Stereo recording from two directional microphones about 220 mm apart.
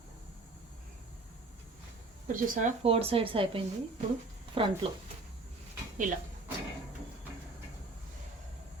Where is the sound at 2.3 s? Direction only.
35° right (ahead or behind).